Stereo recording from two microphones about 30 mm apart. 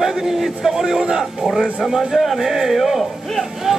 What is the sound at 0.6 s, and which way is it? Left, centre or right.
Speech, centre.